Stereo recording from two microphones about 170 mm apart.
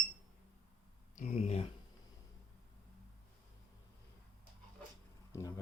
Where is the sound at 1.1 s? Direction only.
45° left (ahead or behind).